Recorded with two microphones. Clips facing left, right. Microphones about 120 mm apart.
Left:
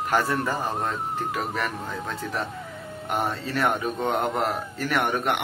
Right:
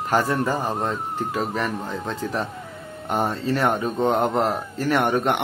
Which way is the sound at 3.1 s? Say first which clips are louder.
Right 4 dB; 30° right (ahead or behind).